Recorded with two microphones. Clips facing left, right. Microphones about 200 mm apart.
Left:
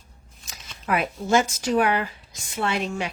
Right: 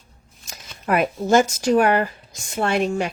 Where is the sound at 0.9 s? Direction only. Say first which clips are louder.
Right 5 dB; 45° right (ahead or behind).